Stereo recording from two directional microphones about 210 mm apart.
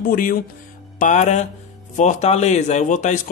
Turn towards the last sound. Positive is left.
turn(degrees=35)  # may be behind; listen again after turning